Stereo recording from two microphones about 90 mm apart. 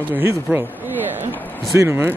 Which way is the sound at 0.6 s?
25° right (ahead or behind).